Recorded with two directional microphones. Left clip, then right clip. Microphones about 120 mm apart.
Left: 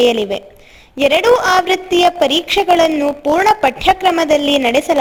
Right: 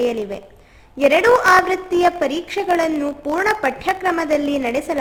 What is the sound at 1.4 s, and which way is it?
A woman's voice, 25° left (ahead or behind).